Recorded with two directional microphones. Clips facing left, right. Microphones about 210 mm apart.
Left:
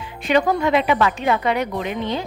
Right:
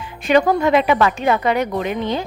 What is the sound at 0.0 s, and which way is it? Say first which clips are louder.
A woman's voice: right 3 dB; 45° right (ahead or behind).